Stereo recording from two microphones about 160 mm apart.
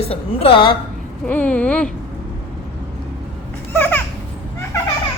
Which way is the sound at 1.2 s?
10° left (ahead or behind).